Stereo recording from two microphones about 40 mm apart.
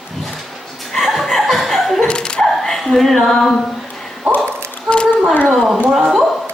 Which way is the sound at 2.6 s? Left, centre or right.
Centre.